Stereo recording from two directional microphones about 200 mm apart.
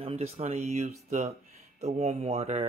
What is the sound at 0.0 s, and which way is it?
Speech, 30° right (ahead or behind).